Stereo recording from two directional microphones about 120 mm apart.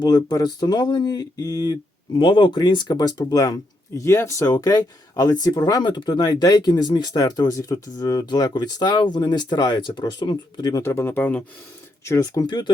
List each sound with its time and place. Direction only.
0.0 s speech: 35° left (ahead or behind); by 11.4 s 15° left (ahead or behind)
12.0 s speech: 25° left (ahead or behind)